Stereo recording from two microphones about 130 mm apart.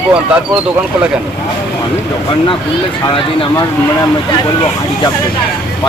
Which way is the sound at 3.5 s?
35° left (ahead or behind).